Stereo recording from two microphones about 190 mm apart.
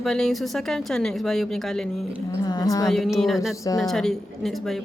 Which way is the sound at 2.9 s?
Centre (ahead or behind).